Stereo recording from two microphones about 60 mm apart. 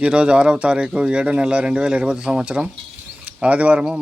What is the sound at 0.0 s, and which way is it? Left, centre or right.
Speech, centre.